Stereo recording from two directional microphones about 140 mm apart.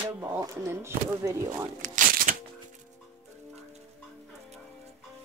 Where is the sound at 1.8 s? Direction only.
75° right (ahead or behind).